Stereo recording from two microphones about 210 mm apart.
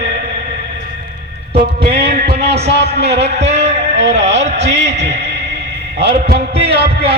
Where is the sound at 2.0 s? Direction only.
50° right (ahead or behind).